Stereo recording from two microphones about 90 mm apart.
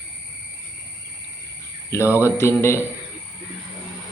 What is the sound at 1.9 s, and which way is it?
Speech, 30° left (ahead or behind).